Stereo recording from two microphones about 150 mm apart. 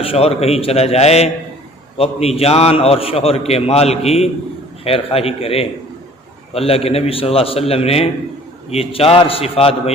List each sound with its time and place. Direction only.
0.0 s a man's voice: 40° left (ahead or behind)